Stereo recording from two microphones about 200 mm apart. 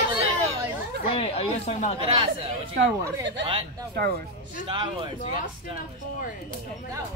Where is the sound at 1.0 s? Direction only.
30° left (ahead or behind).